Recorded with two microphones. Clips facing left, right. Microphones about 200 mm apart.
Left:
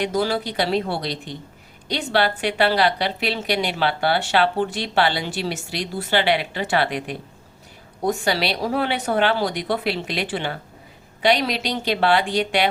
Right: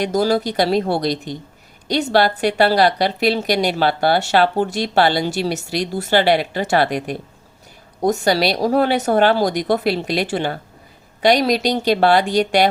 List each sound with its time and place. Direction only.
0.0 s a woman's voice: 40° right (ahead or behind)